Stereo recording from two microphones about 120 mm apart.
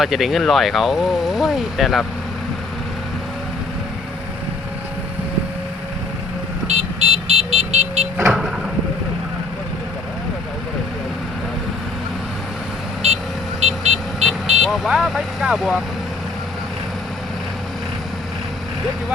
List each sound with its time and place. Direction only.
0.0 s speech: centre (ahead or behind)
6.7 s vehicle: 60° right (ahead or behind)
8.3 s vehicle: 5° right (ahead or behind)
13.0 s vehicle: 65° right (ahead or behind)
14.6 s speech: 5° right (ahead or behind)